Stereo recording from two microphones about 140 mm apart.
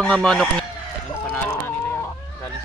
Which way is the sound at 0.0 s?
5° left (ahead or behind).